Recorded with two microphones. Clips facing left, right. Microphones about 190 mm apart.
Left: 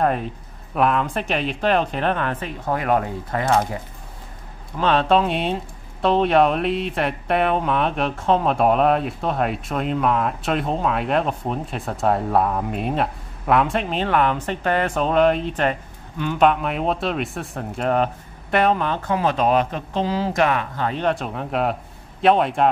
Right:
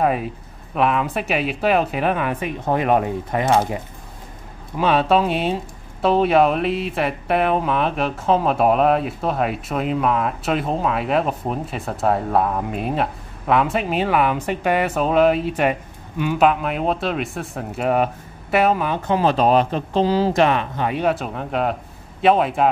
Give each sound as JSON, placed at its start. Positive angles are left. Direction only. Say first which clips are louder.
{"t": 0.0, "sound": "speech", "louder": "right 1 dB", "side_deg": -5}
{"t": 2.6, "sound": "speech", "louder": "right 3 dB", "side_deg": -20}
{"t": 4.7, "sound": "speech", "louder": "right 1 dB", "side_deg": -10}
{"t": 19.0, "sound": "speech", "louder": "right 3 dB", "side_deg": -30}
{"t": 20.8, "sound": "speech", "louder": "right 1 dB", "side_deg": -10}